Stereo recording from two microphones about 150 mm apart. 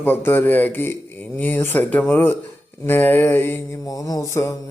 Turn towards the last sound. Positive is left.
turn(degrees=20)  # may be behind; listen again after turning